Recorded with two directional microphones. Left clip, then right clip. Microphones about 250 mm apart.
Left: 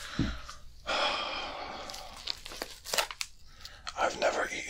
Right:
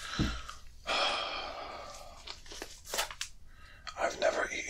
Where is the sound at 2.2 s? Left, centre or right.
Left.